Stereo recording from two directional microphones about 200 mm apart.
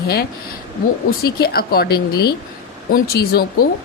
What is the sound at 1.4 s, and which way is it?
A woman's voice, 50° left (ahead or behind).